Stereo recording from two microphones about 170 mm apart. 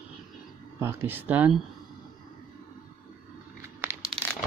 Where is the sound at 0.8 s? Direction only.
15° right (ahead or behind).